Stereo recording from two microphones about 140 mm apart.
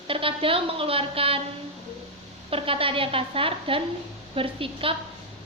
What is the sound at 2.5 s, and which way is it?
A woman's voice, 40° right (ahead or behind).